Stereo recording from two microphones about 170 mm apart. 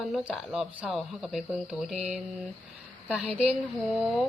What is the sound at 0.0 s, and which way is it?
A woman's voice, centre (ahead or behind).